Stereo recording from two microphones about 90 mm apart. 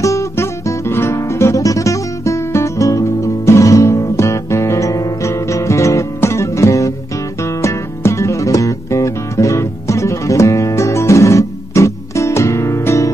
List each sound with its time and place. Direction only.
0.0 s guitar: 35° left (ahead or behind)
7.4 s music: 35° left (ahead or behind)